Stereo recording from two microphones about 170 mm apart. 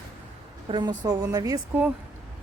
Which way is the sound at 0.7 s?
25° right (ahead or behind).